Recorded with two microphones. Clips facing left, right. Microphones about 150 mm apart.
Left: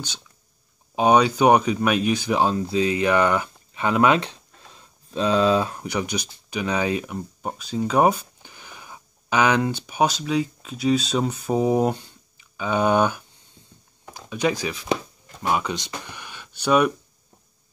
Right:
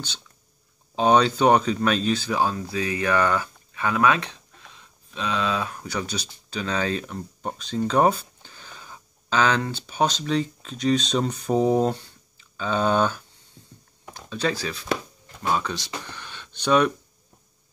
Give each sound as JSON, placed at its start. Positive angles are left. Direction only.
{"t": 0.9, "sound": "speech", "side_deg": 10}
{"t": 5.8, "sound": "speech", "side_deg": 15}
{"t": 14.3, "sound": "speech", "side_deg": 15}